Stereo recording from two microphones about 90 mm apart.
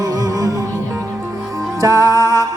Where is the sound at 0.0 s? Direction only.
45° right (ahead or behind).